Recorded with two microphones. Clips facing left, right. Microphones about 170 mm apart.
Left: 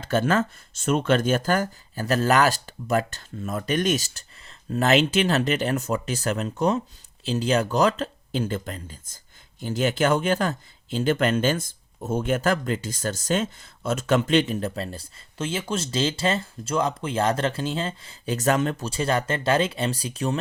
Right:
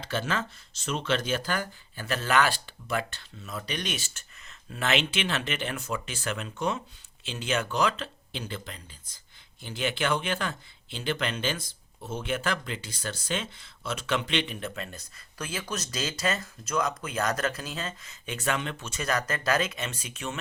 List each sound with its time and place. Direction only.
0.0 s speech: 50° left (ahead or behind)